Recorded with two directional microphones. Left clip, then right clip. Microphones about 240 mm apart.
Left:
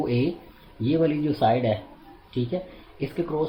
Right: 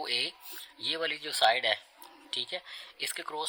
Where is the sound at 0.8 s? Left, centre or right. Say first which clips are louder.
Left 9 dB; right.